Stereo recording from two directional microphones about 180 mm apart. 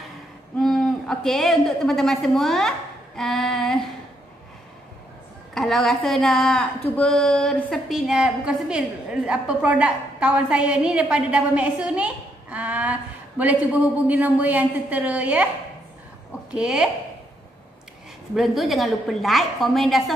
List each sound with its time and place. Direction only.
0.6 s a woman's voice: centre (ahead or behind)
5.5 s a woman's voice: centre (ahead or behind)
16.5 s a woman's voice: 5° right (ahead or behind)
18.3 s a woman's voice: centre (ahead or behind)